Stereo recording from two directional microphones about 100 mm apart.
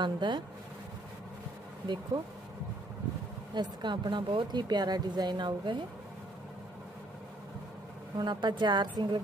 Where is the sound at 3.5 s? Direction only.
50° right (ahead or behind).